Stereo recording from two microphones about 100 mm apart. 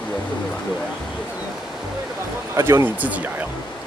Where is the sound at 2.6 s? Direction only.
30° right (ahead or behind).